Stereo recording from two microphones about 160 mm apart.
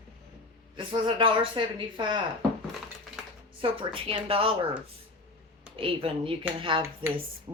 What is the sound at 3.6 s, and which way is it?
Speech, 35° right (ahead or behind).